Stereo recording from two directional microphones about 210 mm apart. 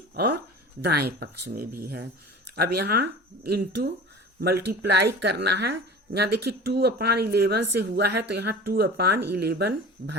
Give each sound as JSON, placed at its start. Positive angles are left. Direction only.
{"t": 0.8, "sound": "speech", "side_deg": -50}